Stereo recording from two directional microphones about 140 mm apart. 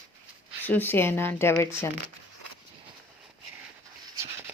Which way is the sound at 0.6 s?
15° left (ahead or behind).